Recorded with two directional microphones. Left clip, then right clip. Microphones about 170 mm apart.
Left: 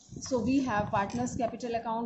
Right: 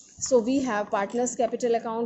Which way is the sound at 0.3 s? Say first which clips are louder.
Right 7 dB; 40° right (ahead or behind).